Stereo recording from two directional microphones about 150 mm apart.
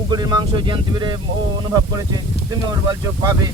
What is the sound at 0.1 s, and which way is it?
Speech, 25° right (ahead or behind).